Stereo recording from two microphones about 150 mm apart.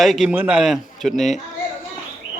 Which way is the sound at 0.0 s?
Centre (ahead or behind).